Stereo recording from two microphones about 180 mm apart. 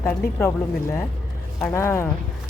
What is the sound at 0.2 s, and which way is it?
Speech, 60° left (ahead or behind).